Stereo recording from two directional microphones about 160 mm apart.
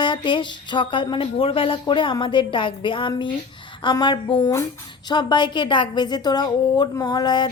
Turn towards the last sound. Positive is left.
turn(degrees=25)  # may be behind; listen again after turning